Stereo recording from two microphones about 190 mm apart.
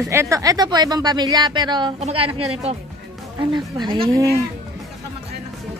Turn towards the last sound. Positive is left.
turn(degrees=-20)  # may be behind; listen again after turning